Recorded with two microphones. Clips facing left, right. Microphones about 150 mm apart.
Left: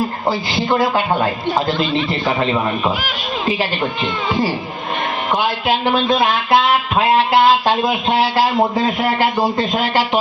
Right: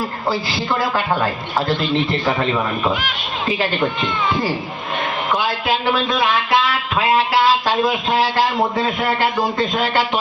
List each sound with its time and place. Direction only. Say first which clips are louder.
0.3 s speech: left 2 dB; 20° left (ahead or behind)
6.1 s speech: left 2 dB; 35° left (ahead or behind)